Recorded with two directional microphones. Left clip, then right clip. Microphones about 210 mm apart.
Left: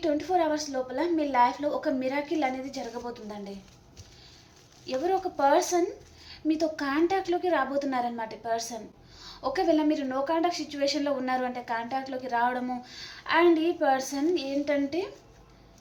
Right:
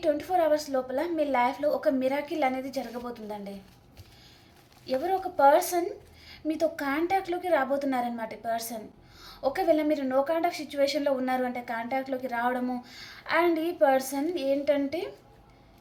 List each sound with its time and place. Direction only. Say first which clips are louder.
0.0 s a woman's voice: right 1 dB; 20° right (ahead or behind)
5.0 s a woman's voice: right 2 dB; 20° right (ahead or behind)